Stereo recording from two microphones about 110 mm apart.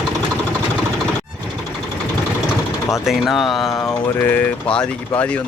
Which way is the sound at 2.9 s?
Centre (ahead or behind).